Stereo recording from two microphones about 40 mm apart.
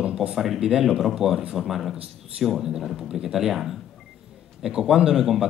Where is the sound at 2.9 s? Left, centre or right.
Centre.